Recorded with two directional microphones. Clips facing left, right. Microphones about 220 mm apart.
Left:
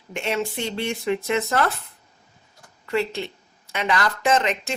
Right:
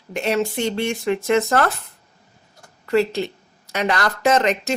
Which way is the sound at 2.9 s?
40° right (ahead or behind).